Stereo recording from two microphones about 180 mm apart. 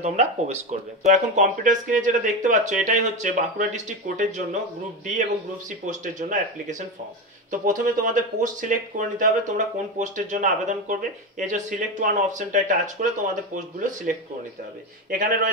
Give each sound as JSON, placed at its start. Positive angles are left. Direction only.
{"t": 0.0, "sound": "speech", "side_deg": -40}
{"t": 5.9, "sound": "speech", "side_deg": -45}